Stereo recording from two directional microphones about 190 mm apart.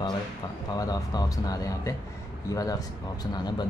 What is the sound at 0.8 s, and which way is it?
A man's voice, 20° left (ahead or behind).